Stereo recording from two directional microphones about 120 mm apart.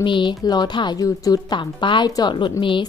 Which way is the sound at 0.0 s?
40° left (ahead or behind).